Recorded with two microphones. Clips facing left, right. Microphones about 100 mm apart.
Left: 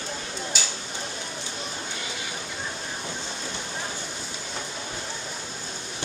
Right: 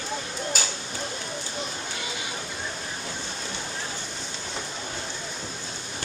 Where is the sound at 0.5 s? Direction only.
45° right (ahead or behind).